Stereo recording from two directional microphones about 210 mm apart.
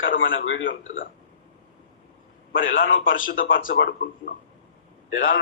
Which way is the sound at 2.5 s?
65° left (ahead or behind).